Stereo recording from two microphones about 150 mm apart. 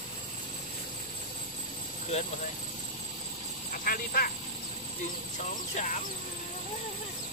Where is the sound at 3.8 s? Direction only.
75° left (ahead or behind).